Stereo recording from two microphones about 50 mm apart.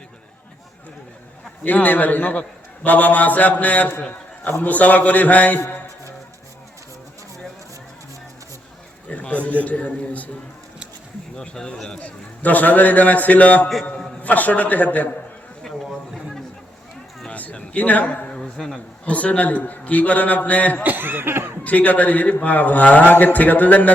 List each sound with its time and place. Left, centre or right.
1.6 s a man's voice: left
9.0 s a sound: left
9.6 s a man's voice: left
11.3 s speech: centre
12.0 s a man's voice: left
17.2 s a sound: left
18.3 s a sound: centre
19.0 s a man's voice: left
20.8 s chuckle: right
21.6 s a man's voice: left